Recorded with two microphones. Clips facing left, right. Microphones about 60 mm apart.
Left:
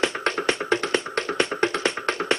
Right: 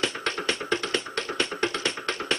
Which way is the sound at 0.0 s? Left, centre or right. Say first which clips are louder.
Left 5 dB; left.